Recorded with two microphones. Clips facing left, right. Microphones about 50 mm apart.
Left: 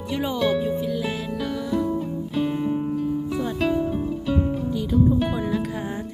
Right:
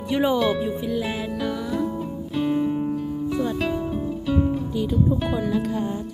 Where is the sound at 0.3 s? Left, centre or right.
Centre.